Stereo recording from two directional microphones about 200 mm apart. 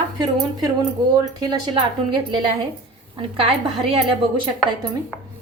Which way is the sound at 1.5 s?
25° right (ahead or behind).